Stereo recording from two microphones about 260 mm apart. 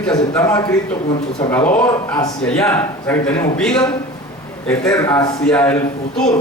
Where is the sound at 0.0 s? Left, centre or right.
Centre.